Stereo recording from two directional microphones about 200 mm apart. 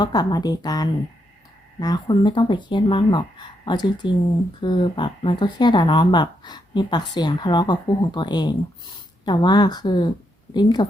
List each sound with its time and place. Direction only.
0.0 s speech: 20° left (ahead or behind)